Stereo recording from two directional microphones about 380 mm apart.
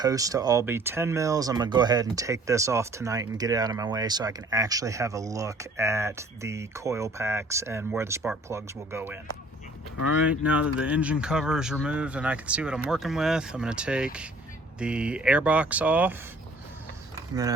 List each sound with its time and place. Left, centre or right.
0.0 s speech: centre
10.2 s speech: centre